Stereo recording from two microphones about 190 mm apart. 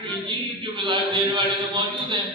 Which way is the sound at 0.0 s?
25° right (ahead or behind).